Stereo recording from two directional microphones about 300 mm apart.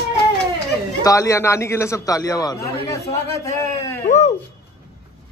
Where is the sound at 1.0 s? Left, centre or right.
Centre.